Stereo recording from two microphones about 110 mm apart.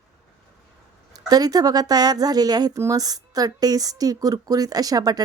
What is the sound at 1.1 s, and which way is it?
Speech, 35° right (ahead or behind).